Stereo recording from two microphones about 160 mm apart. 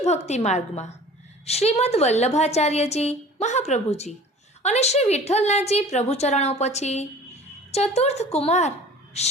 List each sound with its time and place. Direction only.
0.0 s a woman's voice: 45° left (ahead or behind)